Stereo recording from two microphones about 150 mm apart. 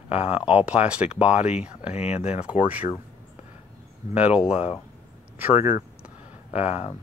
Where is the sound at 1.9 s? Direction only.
45° left (ahead or behind).